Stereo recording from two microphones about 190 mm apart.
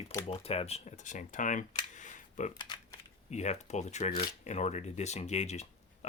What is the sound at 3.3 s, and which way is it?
Speech, 35° left (ahead or behind).